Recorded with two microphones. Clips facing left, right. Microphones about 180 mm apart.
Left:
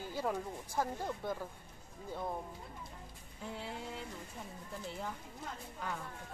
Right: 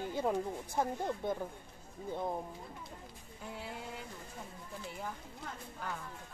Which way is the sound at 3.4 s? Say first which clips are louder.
Left 1 dB; 5° right (ahead or behind).